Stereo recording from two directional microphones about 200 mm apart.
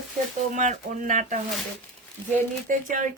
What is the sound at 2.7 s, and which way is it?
Speech, 40° right (ahead or behind).